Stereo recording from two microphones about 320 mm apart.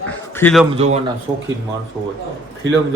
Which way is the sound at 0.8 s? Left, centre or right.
Centre.